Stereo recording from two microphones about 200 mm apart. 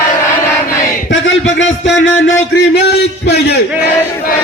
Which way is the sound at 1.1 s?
70° left (ahead or behind).